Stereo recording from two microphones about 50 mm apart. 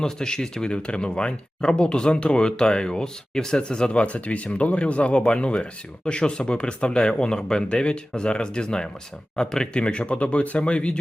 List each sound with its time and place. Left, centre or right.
0.0 s speech: centre